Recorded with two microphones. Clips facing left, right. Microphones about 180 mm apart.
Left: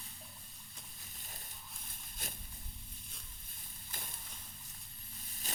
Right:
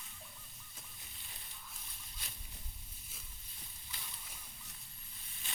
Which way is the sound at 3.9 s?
50° left (ahead or behind).